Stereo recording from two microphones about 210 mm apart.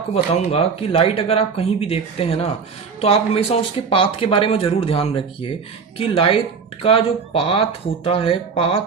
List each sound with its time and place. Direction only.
0.1 s speech: 30° left (ahead or behind)